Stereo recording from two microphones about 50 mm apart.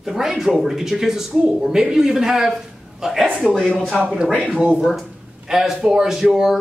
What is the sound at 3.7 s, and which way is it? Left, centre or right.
Speech, left.